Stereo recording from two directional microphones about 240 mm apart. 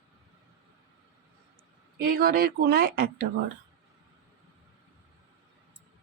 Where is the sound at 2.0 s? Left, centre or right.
Right.